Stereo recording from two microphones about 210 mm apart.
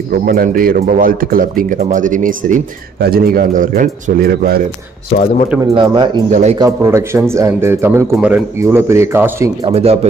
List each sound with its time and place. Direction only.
0.1 s a man's voice: 45° right (ahead or behind)
5.8 s speech: 20° right (ahead or behind)
6.3 s speech: 30° right (ahead or behind)
6.6 s speech: 10° right (ahead or behind)
9.6 s speech: 30° right (ahead or behind)